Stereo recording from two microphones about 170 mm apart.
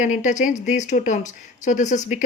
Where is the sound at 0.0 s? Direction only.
45° left (ahead or behind).